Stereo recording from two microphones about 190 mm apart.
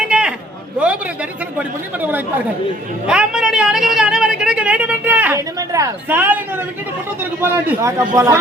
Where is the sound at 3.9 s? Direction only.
5° right (ahead or behind).